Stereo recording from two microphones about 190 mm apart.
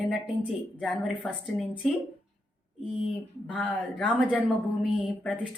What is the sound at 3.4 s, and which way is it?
Speech, 5° left (ahead or behind).